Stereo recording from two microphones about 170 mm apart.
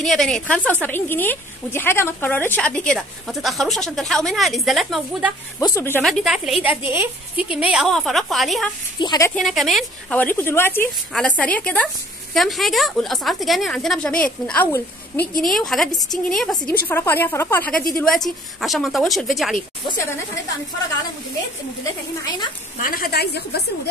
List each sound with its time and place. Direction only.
0.0 s speech: centre (ahead or behind)
5.6 s a woman's voice: 15° left (ahead or behind)
6.0 s speech: centre (ahead or behind)
9.0 s speech: 25° left (ahead or behind)
9.3 s speech: centre (ahead or behind)
10.1 s a woman's voice: 10° left (ahead or behind)
22.8 s a woman's voice: 55° left (ahead or behind); by 23.6 s 75° left (ahead or behind)